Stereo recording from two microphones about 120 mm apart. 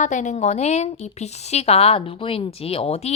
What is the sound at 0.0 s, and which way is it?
A woman's voice, 90° left.